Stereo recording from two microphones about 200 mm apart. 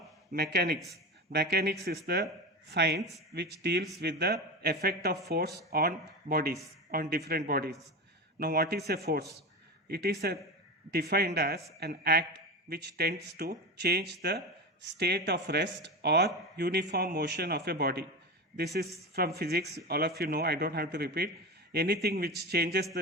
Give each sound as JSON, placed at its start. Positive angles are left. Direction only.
{"t": 0.3, "sound": "a man's voice", "side_deg": -50}